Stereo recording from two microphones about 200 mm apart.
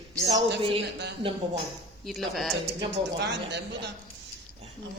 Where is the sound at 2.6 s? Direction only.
60° right (ahead or behind).